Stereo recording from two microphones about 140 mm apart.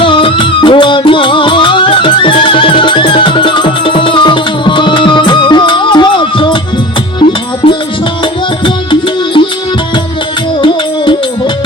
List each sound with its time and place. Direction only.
0.0 s music: 35° left (ahead or behind)
8.2 s music: 35° left (ahead or behind)
10.6 s music: 35° left (ahead or behind)